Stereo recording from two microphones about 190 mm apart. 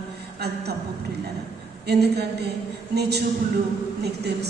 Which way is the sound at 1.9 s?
60° right (ahead or behind).